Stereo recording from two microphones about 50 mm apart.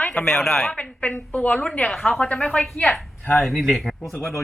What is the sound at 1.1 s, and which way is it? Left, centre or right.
Speech, left.